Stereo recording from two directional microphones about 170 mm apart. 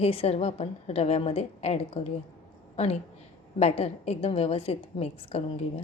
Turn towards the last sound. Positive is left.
turn(degrees=35)  # may be behind; listen again after turning